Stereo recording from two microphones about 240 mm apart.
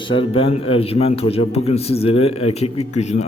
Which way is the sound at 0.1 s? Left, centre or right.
Left.